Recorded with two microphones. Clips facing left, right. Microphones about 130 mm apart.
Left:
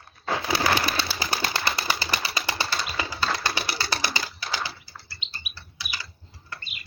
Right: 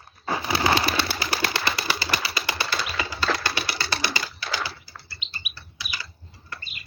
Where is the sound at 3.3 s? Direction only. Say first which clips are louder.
Right 3 dB; 90° right.